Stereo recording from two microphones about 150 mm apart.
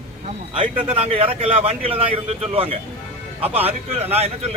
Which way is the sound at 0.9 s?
40° right (ahead or behind).